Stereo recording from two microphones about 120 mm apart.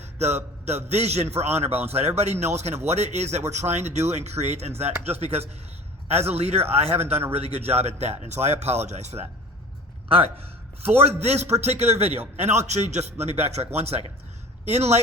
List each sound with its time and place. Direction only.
0.0 s a sound: 65° right (ahead or behind)
0.6 s speech: 65° right (ahead or behind)
10.1 s a man's voice: 50° right (ahead or behind)